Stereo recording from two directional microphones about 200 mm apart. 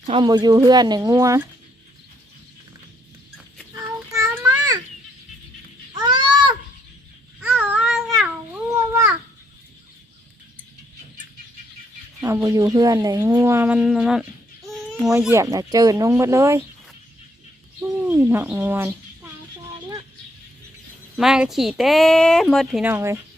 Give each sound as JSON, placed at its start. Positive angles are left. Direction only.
{"t": 0.1, "sound": "speech", "side_deg": -20}
{"t": 3.8, "sound": "child singing", "side_deg": -15}
{"t": 5.9, "sound": "a sound", "side_deg": -20}
{"t": 7.4, "sound": "cat", "side_deg": -10}
{"t": 12.2, "sound": "speech", "side_deg": -15}
{"t": 15.2, "sound": "speech", "side_deg": -15}
{"t": 17.7, "sound": "a child's voice", "side_deg": -15}
{"t": 21.2, "sound": "speech", "side_deg": -5}